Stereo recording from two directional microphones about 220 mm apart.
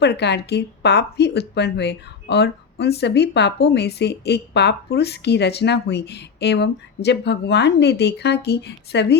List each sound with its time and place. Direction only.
0.0 s speech: 50° left (ahead or behind)